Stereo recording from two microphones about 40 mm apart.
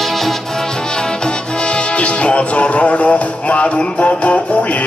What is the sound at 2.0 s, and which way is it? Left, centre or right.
Music, left.